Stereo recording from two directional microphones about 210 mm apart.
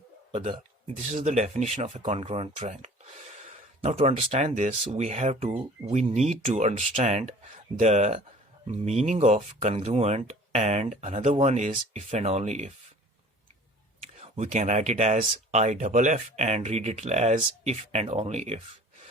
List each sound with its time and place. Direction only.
0.3 s speech: 30° right (ahead or behind)
14.2 s speech: 35° right (ahead or behind)